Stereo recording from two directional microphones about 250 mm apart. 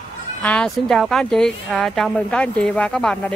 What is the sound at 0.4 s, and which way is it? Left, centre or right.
Speech, centre.